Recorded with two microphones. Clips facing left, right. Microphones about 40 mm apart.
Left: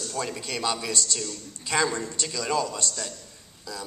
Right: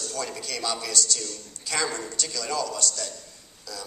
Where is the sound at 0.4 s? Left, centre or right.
Left.